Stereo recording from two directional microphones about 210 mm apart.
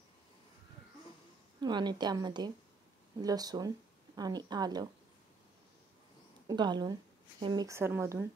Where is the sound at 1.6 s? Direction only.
20° right (ahead or behind).